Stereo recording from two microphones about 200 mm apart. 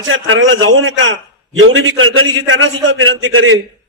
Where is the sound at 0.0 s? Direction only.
80° right.